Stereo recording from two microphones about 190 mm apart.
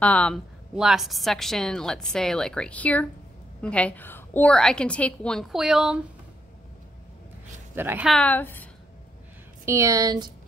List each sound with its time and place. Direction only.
0.0 s a woman's voice: 5° left (ahead or behind)
7.7 s a woman's voice: 10° right (ahead or behind)
8.1 s a woman's voice: 5° left (ahead or behind)
9.7 s speech: 15° right (ahead or behind)